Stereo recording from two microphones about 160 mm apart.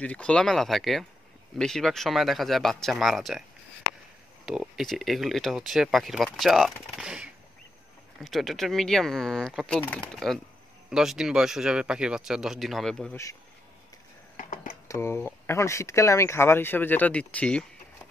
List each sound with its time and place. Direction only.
0.0 s speech: 5° left (ahead or behind)
4.5 s speech: centre (ahead or behind)
13.1 s speech: 20° left (ahead or behind)
14.3 s a sound: 55° left (ahead or behind)
14.9 s speech: 15° left (ahead or behind)